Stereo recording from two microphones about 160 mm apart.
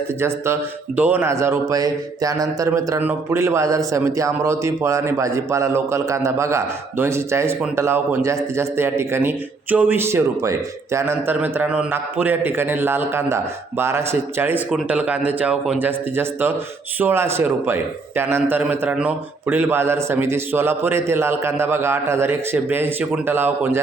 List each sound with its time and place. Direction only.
0.2 s a man's voice: 15° right (ahead or behind)